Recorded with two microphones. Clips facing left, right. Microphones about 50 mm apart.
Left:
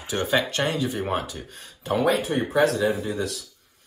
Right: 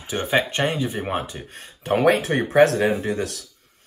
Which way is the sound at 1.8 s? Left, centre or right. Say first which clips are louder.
Right 4 dB; right.